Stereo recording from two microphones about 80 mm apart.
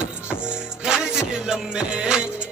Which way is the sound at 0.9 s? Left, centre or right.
Centre.